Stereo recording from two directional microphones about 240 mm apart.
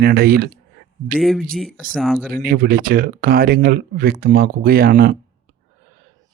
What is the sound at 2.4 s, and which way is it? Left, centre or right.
Speech, right.